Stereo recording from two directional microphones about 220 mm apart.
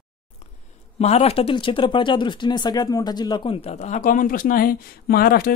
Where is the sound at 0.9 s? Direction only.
30° left (ahead or behind).